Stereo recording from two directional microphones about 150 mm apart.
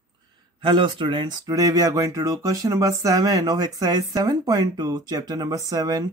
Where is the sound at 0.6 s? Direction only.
30° right (ahead or behind).